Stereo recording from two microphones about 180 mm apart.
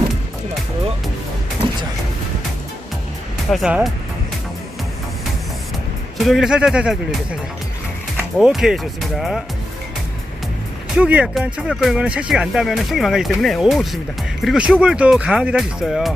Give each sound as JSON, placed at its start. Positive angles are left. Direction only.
{"t": 1.6, "sound": "music", "side_deg": -25}
{"t": 3.5, "sound": "speech", "side_deg": -5}
{"t": 6.1, "sound": "speech", "side_deg": 0}
{"t": 8.1, "sound": "speech", "side_deg": -5}
{"t": 10.9, "sound": "speech", "side_deg": -5}